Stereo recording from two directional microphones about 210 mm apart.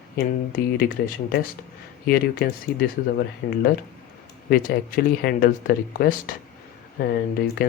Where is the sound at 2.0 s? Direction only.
50° left (ahead or behind).